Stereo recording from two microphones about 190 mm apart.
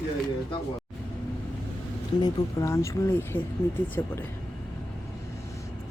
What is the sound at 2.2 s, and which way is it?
Speech, 15° left (ahead or behind).